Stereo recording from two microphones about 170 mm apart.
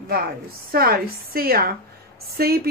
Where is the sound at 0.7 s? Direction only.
60° right (ahead or behind).